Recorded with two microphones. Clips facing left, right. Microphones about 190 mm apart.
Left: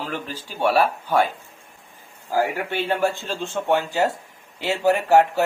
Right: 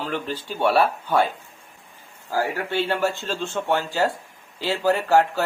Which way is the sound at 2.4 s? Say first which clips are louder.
Even; 15° left (ahead or behind).